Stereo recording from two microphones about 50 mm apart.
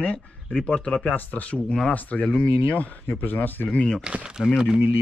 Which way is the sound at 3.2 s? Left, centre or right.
Left.